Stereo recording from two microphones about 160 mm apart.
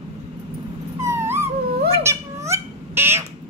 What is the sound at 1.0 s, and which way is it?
Dog, 15° right (ahead or behind).